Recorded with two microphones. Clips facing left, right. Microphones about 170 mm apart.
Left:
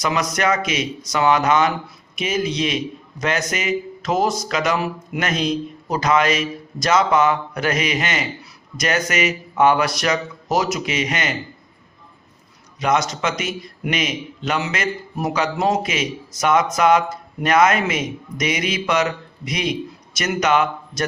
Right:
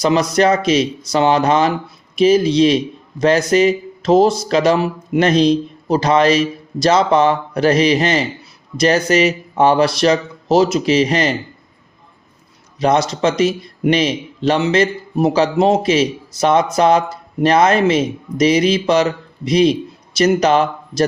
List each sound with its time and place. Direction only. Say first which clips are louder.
0.0 s speech: right 7 dB; 30° right (ahead or behind)
12.8 s speech: right 5 dB; 30° right (ahead or behind)